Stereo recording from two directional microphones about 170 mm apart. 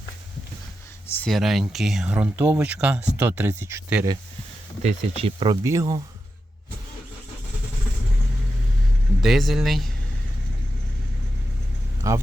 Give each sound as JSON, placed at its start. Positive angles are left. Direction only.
{"t": 1.1, "sound": "speech", "side_deg": 5}
{"t": 4.8, "sound": "speech", "side_deg": -35}
{"t": 5.6, "sound": "speech", "side_deg": -20}
{"t": 9.2, "sound": "speech", "side_deg": 0}
{"t": 12.0, "sound": "a man's voice", "side_deg": -20}